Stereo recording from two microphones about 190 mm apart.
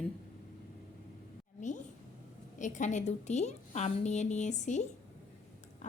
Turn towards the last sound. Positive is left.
turn(degrees=40)  # may be behind; listen again after turning